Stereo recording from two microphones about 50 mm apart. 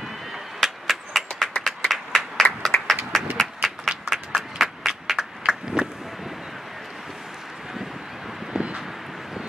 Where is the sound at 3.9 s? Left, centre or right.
Centre.